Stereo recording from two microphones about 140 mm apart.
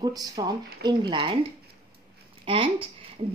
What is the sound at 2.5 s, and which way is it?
Speech, 40° right (ahead or behind).